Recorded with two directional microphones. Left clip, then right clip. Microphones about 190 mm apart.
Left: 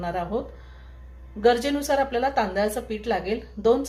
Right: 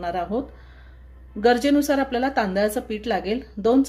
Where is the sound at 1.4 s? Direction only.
45° right (ahead or behind).